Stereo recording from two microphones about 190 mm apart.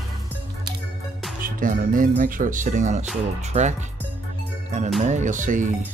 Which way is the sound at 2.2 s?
45° right (ahead or behind).